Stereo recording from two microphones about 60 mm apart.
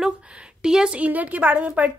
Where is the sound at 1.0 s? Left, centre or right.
Right.